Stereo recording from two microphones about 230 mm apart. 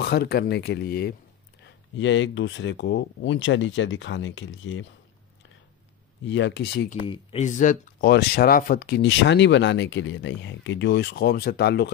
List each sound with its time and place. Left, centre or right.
0.0 s speech: left
6.2 s speech: left
7.1 s speech: left